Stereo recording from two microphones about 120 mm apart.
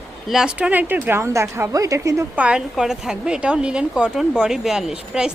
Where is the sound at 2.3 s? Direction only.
10° right (ahead or behind).